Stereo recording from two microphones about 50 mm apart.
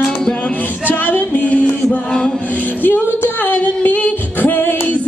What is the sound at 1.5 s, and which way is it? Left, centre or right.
Mantra, left.